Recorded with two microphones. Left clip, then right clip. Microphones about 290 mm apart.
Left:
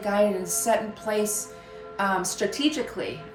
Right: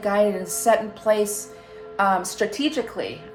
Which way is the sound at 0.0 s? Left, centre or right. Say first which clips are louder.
Right 3 dB; right.